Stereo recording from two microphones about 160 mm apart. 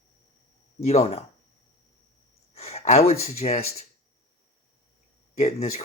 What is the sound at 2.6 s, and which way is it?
Speech, 40° left (ahead or behind).